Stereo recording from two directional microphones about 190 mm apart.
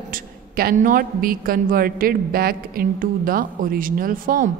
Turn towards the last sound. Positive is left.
turn(degrees=-50)  # may be behind; listen again after turning